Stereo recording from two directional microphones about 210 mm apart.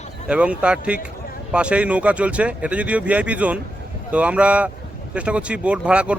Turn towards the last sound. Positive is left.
turn(degrees=-5)  # may be behind; listen again after turning